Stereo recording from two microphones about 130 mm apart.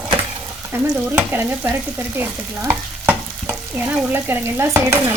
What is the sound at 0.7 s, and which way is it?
Stir, 15° right (ahead or behind).